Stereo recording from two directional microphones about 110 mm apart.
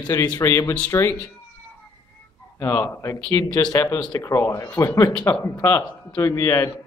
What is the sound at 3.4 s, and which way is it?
Speech, 35° left (ahead or behind).